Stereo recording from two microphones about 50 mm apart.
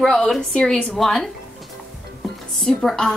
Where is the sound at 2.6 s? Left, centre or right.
Centre.